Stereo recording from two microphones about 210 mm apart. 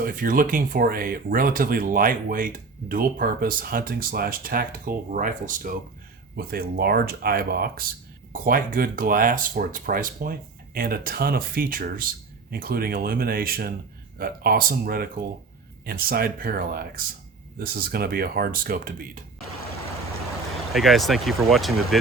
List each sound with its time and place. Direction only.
0.0 s speech: 40° right (ahead or behind)
20.7 s speech: centre (ahead or behind)